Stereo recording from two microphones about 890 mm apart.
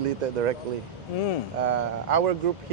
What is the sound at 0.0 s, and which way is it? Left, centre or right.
Speech, right.